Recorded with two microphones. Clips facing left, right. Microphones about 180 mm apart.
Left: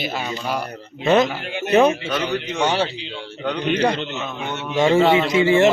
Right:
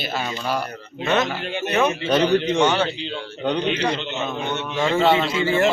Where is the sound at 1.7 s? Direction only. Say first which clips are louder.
Left 4 dB; 30° left (ahead or behind).